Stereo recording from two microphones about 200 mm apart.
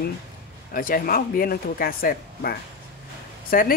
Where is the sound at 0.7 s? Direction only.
45° left (ahead or behind).